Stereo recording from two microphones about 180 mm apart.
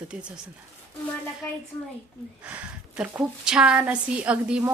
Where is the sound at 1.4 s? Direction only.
15° left (ahead or behind).